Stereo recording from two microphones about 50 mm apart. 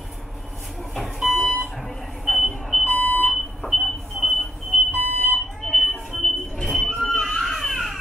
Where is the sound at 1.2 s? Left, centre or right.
Centre.